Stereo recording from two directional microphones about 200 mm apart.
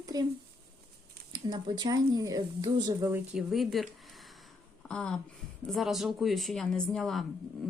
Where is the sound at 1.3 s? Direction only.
20° right (ahead or behind).